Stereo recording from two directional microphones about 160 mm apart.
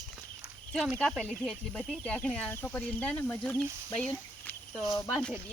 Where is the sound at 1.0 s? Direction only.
5° left (ahead or behind).